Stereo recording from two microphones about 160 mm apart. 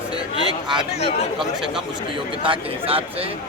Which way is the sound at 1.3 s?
5° right (ahead or behind).